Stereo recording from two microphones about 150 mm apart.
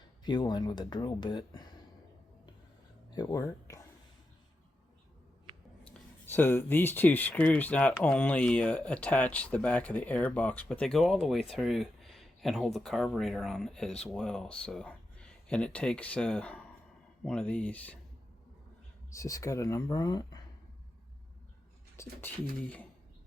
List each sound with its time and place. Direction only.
0.3 s speech: 30° left (ahead or behind)
3.1 s speech: 25° left (ahead or behind)
5.8 s speech: 10° left (ahead or behind)
19.1 s speech: 20° left (ahead or behind)
22.0 s speech: 20° left (ahead or behind)